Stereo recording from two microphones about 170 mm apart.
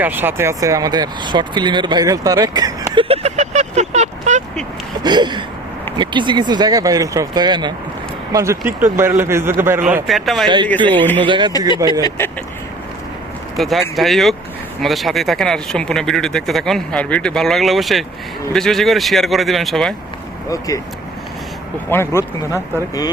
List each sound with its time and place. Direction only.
0.0 s speech: 10° right (ahead or behind)
2.9 s vehicle: 35° right (ahead or behind)
5.0 s speech: 25° right (ahead or behind); by 11.3 s 10° left (ahead or behind)
11.3 s speech: 25° right (ahead or behind)
12.0 s speech: 15° left (ahead or behind)
13.6 s speech: centre (ahead or behind)
20.5 s speech: 20° left (ahead or behind)
21.8 s speech: 15° left (ahead or behind)